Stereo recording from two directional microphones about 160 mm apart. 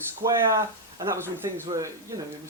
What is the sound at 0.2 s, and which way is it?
Speech, 20° right (ahead or behind).